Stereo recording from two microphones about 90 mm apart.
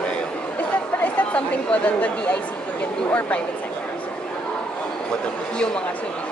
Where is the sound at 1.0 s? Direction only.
15° left (ahead or behind).